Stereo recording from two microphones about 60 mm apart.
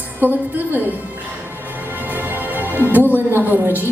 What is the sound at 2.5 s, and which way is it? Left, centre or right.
Music, right.